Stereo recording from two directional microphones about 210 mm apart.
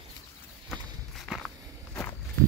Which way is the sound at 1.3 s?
10° left (ahead or behind).